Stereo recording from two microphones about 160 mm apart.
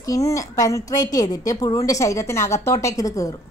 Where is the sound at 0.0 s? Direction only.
20° left (ahead or behind).